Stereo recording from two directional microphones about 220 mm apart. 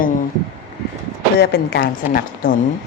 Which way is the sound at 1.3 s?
50° left (ahead or behind).